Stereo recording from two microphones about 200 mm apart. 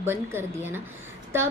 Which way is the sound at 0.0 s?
10° right (ahead or behind).